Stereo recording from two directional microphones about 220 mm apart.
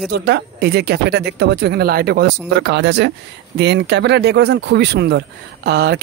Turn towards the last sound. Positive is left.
turn(degrees=-50)  # may be behind; listen again after turning